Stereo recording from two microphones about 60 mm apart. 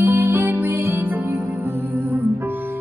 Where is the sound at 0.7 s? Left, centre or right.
Right.